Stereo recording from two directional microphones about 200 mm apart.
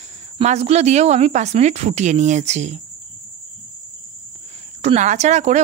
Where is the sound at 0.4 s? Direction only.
35° right (ahead or behind).